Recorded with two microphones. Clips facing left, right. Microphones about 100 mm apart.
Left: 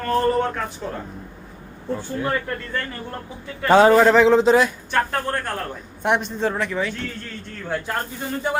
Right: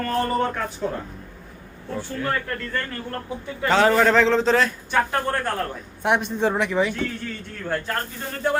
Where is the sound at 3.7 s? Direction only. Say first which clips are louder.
Left 5 dB; 20° left (ahead or behind).